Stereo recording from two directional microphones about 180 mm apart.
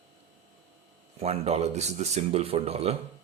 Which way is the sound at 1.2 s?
35° right (ahead or behind).